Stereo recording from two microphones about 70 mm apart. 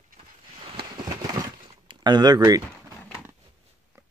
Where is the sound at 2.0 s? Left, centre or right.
Right.